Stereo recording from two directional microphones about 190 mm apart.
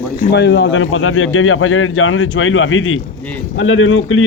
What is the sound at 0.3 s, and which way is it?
A man's voice, 65° left (ahead or behind).